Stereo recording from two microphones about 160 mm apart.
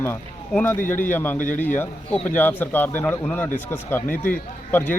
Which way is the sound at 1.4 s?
55° left (ahead or behind).